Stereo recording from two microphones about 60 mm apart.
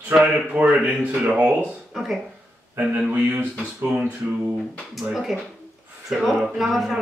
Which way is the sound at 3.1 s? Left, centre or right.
Right.